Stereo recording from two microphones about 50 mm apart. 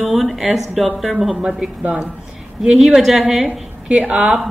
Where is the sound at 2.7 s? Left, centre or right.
Centre.